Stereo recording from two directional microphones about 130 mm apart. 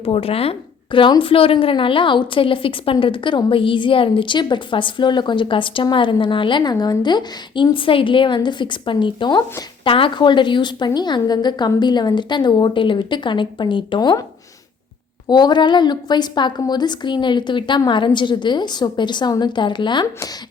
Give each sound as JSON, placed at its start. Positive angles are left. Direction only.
{"t": 0.0, "sound": "a woman's voice", "side_deg": 45}
{"t": 15.3, "sound": "a woman's voice", "side_deg": 35}